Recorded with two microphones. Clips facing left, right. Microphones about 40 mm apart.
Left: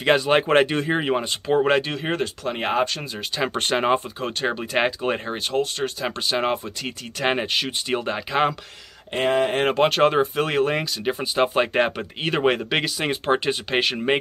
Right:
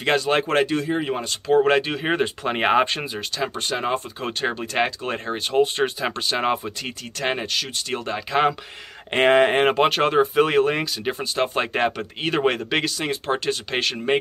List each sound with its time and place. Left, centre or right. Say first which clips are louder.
0.0 s speech: left 2 dB; centre; by 1.1 s left
1.1 s speech: right 1 dB; centre
1.6 s speech: right 1 dB; centre
2.0 s speech: right 3 dB; right
3.7 s speech: left 5 dB; left
4.2 s speech: even; centre
4.6 s speech: left 1 dB; centre
7.2 s speech: left 2 dB; centre
9.1 s speech: right 4 dB; right
9.6 s speech: even; centre
13.0 s speech: left 2 dB; centre